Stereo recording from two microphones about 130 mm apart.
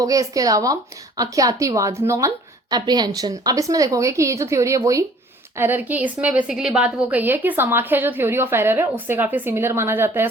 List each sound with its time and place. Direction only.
0.0 s a woman's voice: 25° right (ahead or behind)